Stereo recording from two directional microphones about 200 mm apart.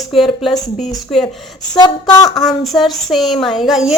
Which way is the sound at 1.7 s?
20° left (ahead or behind).